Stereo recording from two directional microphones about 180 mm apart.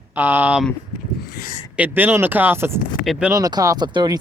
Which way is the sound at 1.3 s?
55° left (ahead or behind).